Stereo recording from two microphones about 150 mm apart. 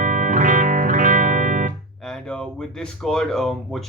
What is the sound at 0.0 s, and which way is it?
Music, 60° right (ahead or behind).